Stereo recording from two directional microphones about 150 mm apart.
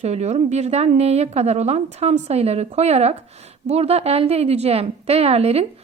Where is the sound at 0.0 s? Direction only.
45° right (ahead or behind).